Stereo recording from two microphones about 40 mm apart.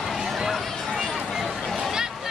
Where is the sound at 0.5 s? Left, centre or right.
Centre.